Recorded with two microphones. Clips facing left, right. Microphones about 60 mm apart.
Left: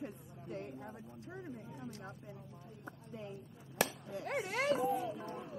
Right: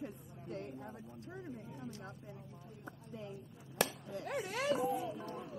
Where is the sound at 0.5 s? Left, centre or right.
Left.